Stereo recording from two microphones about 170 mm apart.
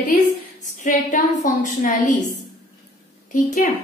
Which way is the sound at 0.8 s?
50° left (ahead or behind).